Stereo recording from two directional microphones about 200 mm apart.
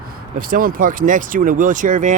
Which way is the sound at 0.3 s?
45° right (ahead or behind).